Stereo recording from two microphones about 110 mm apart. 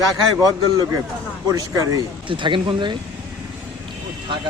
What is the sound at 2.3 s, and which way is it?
Speech, 50° right (ahead or behind).